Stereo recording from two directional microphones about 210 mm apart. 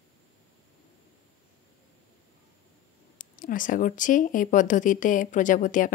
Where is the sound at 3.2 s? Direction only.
40° left (ahead or behind).